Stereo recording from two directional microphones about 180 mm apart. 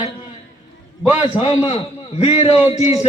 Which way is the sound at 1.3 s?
40° left (ahead or behind).